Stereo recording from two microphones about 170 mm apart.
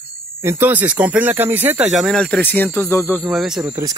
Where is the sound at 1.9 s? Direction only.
Centre (ahead or behind).